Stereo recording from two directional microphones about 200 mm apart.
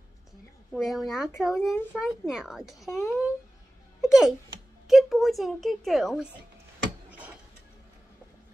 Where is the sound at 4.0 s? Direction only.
Centre (ahead or behind).